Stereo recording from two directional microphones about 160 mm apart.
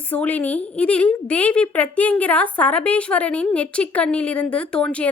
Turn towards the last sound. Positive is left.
turn(degrees=5)  # may be behind; listen again after turning